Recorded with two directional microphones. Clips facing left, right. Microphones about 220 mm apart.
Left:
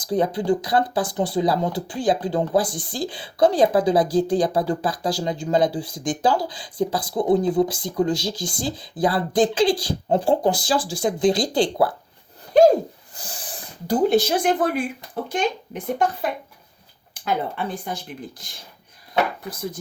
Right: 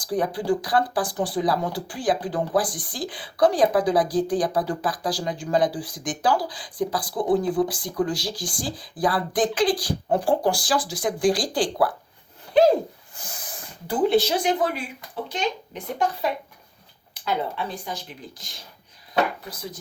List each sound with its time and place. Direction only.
0.0 s speech: 25° left (ahead or behind)
12.5 s a sound: 45° left (ahead or behind)
13.1 s speech: 30° left (ahead or behind); by 18.5 s 55° left (ahead or behind)